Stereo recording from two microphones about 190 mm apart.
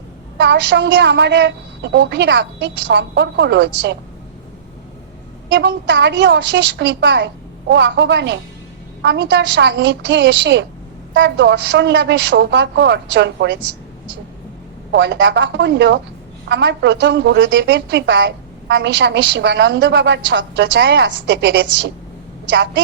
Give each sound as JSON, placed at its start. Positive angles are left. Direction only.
{"t": 0.4, "sound": "a woman's voice", "side_deg": -65}
{"t": 5.5, "sound": "a woman's voice", "side_deg": -65}
{"t": 14.9, "sound": "a woman's voice", "side_deg": -70}